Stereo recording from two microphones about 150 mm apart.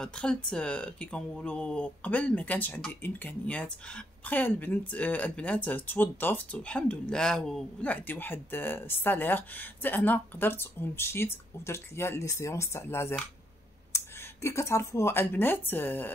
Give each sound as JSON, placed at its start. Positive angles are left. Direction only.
{"t": 0.0, "sound": "speech", "side_deg": 5}